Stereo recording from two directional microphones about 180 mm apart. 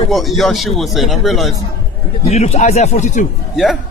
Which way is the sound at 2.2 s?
35° left (ahead or behind).